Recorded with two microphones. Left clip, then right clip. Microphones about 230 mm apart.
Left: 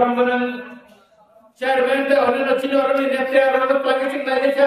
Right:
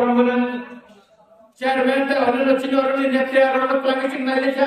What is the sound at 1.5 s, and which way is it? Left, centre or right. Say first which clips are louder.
Chant: left 1 dB; centre.